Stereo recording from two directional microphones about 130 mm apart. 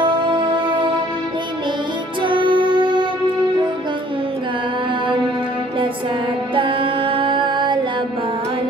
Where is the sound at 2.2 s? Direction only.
40° right (ahead or behind).